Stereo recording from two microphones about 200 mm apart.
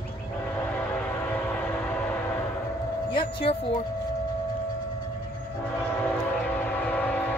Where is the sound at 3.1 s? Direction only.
25° left (ahead or behind).